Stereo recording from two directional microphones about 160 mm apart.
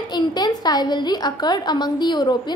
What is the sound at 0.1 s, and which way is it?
A woman's voice, 25° left (ahead or behind).